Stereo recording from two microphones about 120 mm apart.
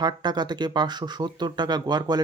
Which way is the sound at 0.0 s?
35° right (ahead or behind).